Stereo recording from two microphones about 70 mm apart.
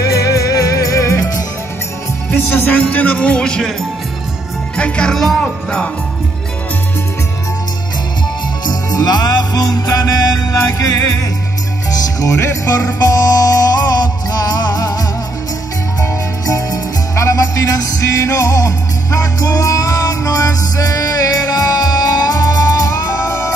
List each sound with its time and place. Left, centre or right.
0.0 s music: left
2.3 s music: left
4.7 s music: centre
8.6 s music: left
12.2 s music: left
12.7 s music: left